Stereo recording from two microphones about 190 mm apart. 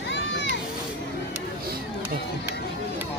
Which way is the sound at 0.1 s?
70° left (ahead or behind).